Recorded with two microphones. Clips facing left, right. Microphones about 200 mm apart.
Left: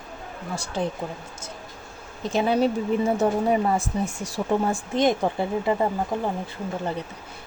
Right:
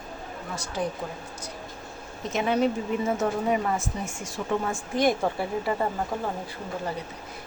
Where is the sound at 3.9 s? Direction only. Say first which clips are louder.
Left 6 dB; 35° left (ahead or behind).